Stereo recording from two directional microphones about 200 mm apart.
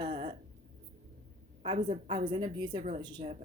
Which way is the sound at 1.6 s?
25° right (ahead or behind).